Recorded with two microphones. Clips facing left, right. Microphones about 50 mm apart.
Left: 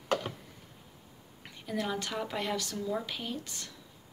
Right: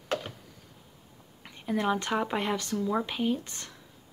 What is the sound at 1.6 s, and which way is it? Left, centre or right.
Speech, right.